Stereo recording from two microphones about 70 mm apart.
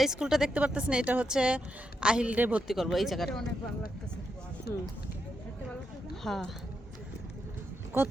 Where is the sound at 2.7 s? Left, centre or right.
Centre.